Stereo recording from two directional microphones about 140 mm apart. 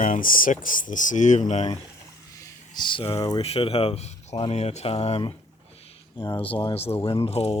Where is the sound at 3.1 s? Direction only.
25° left (ahead or behind).